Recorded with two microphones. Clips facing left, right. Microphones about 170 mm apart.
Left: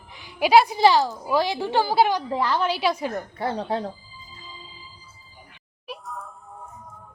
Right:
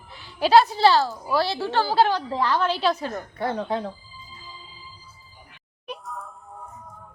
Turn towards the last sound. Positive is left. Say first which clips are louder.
# right 1 dB
turn(degrees=0)  # may be behind; listen again after turning